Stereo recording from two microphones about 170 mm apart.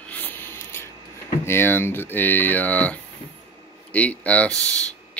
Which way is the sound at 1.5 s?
15° left (ahead or behind).